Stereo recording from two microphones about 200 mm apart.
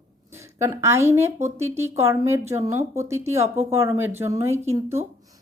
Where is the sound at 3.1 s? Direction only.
15° right (ahead or behind).